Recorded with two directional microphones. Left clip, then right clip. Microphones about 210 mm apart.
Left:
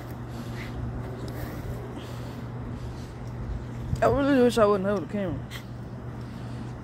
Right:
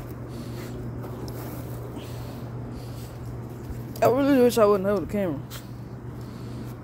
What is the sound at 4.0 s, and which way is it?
Speech, 15° right (ahead or behind).